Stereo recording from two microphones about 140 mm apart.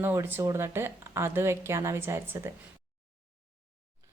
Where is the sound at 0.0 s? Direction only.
15° right (ahead or behind).